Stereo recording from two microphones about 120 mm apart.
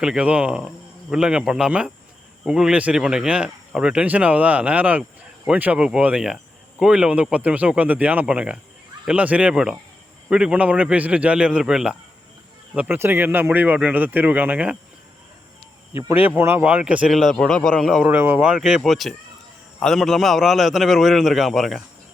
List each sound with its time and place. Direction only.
0.0 s speech: 10° right (ahead or behind)
16.0 s a man's voice: 20° right (ahead or behind); by 18.0 s centre (ahead or behind)
18.0 s a man's voice: 15° right (ahead or behind)